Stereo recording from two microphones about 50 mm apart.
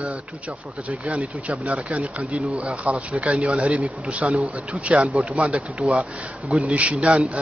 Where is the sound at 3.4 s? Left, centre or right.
Right.